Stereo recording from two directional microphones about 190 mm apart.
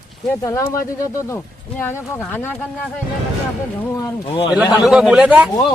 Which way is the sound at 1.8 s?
10° left (ahead or behind).